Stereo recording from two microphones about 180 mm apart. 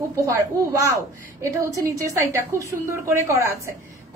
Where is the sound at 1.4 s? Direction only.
15° right (ahead or behind).